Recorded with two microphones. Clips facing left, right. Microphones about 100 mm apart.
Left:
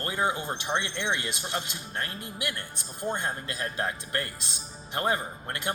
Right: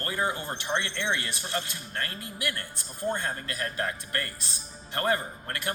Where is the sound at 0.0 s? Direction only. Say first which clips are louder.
Left 1 dB; 20° left (ahead or behind).